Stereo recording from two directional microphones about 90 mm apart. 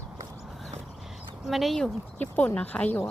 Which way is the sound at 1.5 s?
Centre (ahead or behind).